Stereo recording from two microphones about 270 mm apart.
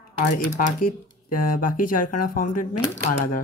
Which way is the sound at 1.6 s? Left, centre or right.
Left.